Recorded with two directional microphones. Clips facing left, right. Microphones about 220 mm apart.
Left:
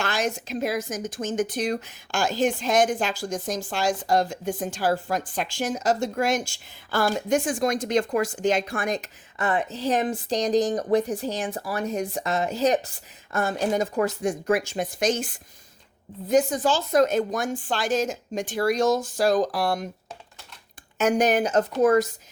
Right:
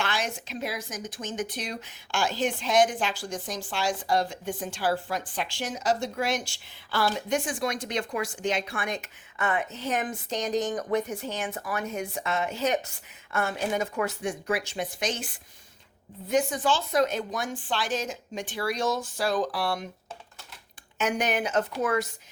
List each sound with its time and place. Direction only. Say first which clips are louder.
0.0 s speech: left 4 dB; 45° left (ahead or behind)
16.3 s speech: left 4 dB; 40° left (ahead or behind)
21.0 s speech: left 6 dB; 40° left (ahead or behind)